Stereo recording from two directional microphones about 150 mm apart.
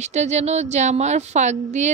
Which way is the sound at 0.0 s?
50° right (ahead or behind).